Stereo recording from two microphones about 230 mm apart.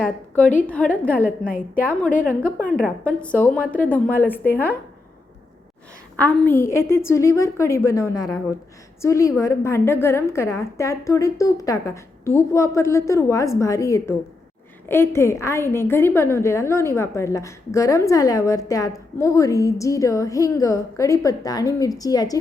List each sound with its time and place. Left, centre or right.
0.0 s a woman's voice: centre
1.4 s a woman's voice: left
2.1 s a woman's voice: centre
6.1 s a woman's voice: centre